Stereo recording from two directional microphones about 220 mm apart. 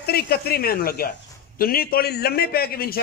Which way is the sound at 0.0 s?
45° left (ahead or behind).